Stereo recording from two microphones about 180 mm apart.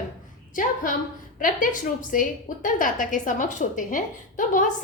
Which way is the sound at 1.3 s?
45° left (ahead or behind).